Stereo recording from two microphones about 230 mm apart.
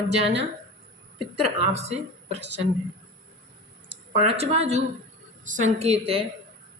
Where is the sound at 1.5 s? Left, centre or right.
Right.